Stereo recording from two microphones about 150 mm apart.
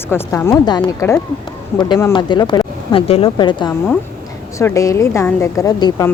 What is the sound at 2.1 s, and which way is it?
Speech, 30° left (ahead or behind).